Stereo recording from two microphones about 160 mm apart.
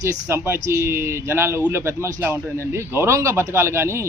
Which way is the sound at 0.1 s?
15° right (ahead or behind).